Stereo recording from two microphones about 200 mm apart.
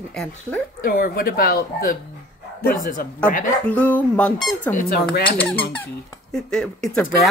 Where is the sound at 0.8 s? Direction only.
45° left (ahead or behind).